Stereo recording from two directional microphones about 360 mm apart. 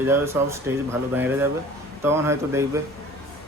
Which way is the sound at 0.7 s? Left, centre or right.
Centre.